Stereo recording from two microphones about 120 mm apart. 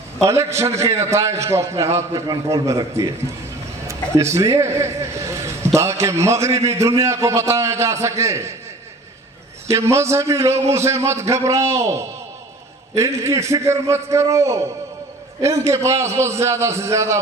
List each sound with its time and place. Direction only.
0.2 s a man's voice: 25° right (ahead or behind)
9.6 s a man's voice: 25° right (ahead or behind)